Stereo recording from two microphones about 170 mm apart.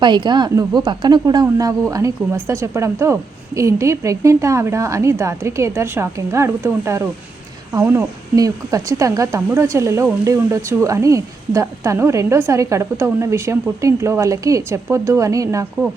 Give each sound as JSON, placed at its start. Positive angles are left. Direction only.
{"t": 0.0, "sound": "speech", "side_deg": -25}